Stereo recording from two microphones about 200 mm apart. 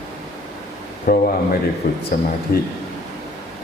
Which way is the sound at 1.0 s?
45° left (ahead or behind).